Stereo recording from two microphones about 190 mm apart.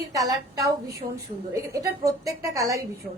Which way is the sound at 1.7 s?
15° right (ahead or behind).